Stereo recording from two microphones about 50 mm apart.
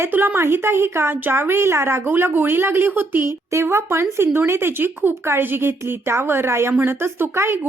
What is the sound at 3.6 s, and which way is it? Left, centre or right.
Speech, right.